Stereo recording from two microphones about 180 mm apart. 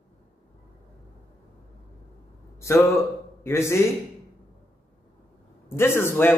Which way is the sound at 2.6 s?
15° left (ahead or behind).